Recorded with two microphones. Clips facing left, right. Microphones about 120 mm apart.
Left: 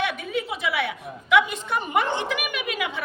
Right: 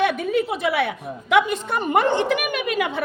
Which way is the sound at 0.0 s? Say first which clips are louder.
Right 7 dB; 50° right (ahead or behind).